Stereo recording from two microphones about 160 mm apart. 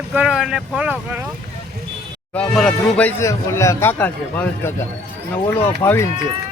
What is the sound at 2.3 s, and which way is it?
Speech, 5° left (ahead or behind).